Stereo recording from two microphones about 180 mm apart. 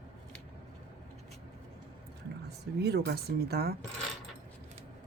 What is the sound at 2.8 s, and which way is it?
Speech, 65° right (ahead or behind).